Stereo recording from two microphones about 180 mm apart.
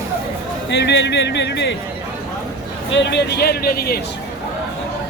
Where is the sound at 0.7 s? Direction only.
75° left (ahead or behind).